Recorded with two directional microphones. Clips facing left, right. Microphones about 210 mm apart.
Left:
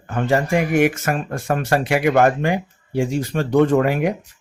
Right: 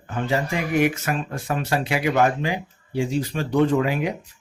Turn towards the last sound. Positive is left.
turn(degrees=55)  # may be behind; listen again after turning